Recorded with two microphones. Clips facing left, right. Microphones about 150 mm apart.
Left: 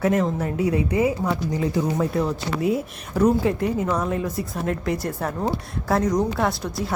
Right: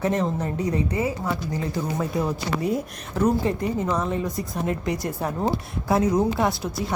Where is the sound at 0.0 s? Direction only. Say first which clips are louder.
Left 2 dB; 5° left (ahead or behind).